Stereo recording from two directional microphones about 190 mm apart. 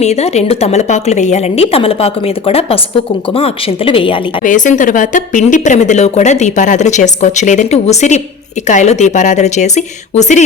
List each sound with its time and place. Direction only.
0.0 s a woman's voice: 35° left (ahead or behind)
4.4 s a woman's voice: 40° left (ahead or behind)